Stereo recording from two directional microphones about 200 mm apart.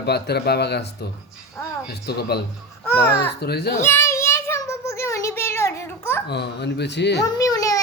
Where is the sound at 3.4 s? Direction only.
55° left (ahead or behind).